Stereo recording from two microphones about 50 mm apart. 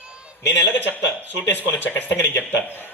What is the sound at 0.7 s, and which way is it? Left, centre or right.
A man's voice, left.